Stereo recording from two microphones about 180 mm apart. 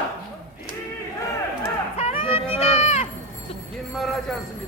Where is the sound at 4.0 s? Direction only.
Centre (ahead or behind).